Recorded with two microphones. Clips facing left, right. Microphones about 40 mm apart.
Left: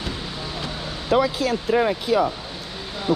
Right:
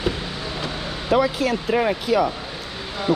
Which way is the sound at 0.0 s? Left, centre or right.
Centre.